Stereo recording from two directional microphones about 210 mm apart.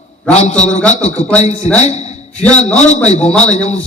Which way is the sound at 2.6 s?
35° left (ahead or behind).